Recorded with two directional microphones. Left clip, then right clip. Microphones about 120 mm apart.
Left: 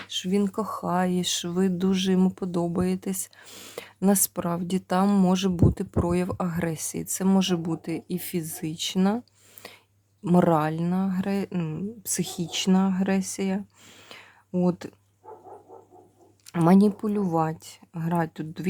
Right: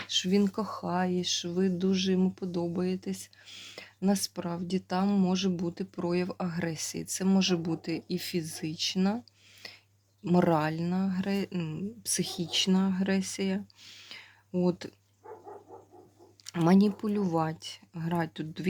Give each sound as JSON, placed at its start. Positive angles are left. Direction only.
{"t": 0.2, "sound": "speech", "side_deg": 10}
{"t": 1.2, "sound": "speech", "side_deg": 55}
{"t": 9.6, "sound": "a sound", "side_deg": 30}
{"t": 10.2, "sound": "speech", "side_deg": 30}
{"t": 16.5, "sound": "speech", "side_deg": 30}